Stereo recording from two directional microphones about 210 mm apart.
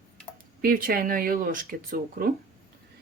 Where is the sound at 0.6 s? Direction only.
40° right (ahead or behind).